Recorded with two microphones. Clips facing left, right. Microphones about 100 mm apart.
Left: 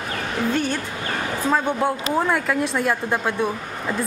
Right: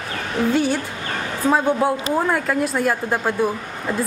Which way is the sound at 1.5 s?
10° right (ahead or behind).